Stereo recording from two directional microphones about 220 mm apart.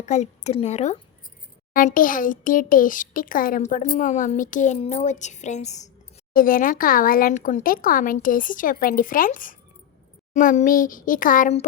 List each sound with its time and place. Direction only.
0.0 s speech: 30° left (ahead or behind)